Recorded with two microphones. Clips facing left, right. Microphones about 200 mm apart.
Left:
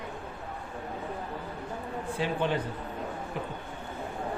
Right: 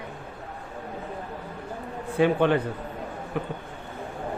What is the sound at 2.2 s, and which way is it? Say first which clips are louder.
A man's voice: right 9 dB; 60° right (ahead or behind).